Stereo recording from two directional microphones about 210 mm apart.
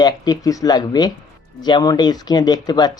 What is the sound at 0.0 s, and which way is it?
Speech, 15° left (ahead or behind).